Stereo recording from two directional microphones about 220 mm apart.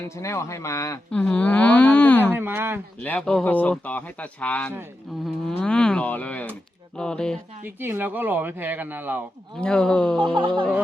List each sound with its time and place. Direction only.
0.2 s speech: 10° left (ahead or behind)
2.3 s speech: 10° right (ahead or behind)
3.0 s speech: 5° left (ahead or behind)
4.7 s speech: 10° right (ahead or behind)
5.5 s speech: 5° left (ahead or behind)
7.6 s speech: 10° right (ahead or behind)
9.6 s speech: 5° left (ahead or behind)
10.2 s speech: 20° right (ahead or behind)
10.5 s speech: 5° left (ahead or behind)